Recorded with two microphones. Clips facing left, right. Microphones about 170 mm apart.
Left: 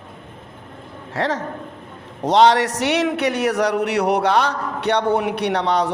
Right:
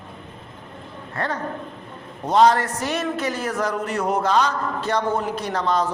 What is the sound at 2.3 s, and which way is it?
A man's voice, 80° left.